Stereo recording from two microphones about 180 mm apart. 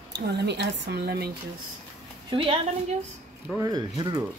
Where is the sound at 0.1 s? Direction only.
70° right (ahead or behind).